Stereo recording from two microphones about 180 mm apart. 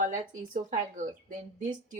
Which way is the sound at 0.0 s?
45° right (ahead or behind).